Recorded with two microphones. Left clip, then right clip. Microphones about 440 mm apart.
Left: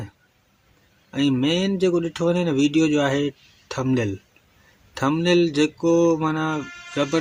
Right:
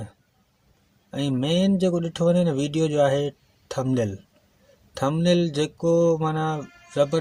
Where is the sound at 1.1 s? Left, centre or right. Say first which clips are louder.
Left 3 dB; right.